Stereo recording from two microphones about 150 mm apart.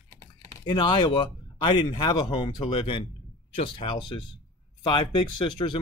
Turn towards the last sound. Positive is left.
turn(degrees=30)  # may be behind; listen again after turning